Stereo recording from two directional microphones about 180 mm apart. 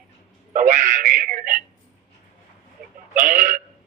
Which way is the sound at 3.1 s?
45° right (ahead or behind).